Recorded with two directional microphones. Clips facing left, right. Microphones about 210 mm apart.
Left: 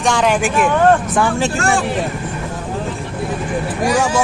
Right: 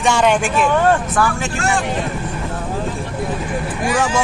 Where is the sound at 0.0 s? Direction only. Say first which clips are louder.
Even; centre (ahead or behind).